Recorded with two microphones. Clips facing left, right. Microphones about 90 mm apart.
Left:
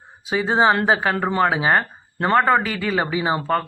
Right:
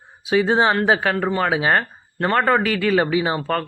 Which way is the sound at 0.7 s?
20° left (ahead or behind).